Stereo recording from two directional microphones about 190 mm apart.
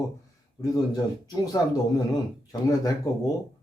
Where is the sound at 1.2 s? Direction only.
20° left (ahead or behind).